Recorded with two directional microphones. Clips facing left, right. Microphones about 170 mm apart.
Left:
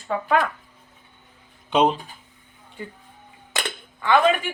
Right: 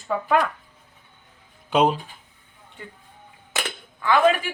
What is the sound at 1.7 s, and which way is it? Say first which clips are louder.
Speech: even; 5° right (ahead or behind).